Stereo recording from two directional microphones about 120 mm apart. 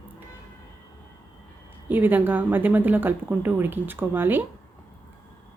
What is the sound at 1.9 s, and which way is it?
Speech, 15° right (ahead or behind).